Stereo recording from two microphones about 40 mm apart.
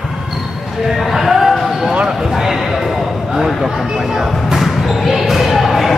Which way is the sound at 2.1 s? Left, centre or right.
Centre.